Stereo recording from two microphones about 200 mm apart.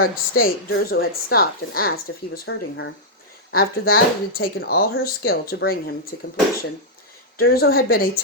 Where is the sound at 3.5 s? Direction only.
50° left (ahead or behind).